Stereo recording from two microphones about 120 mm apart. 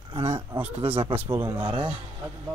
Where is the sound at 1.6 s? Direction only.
45° right (ahead or behind).